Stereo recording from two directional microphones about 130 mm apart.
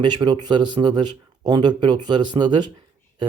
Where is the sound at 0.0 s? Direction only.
35° right (ahead or behind).